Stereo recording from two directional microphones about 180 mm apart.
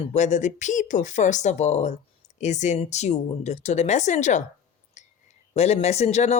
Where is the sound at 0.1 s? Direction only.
40° left (ahead or behind).